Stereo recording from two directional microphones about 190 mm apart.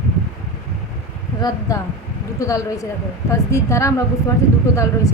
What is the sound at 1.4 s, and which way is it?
A woman's voice, 20° left (ahead or behind).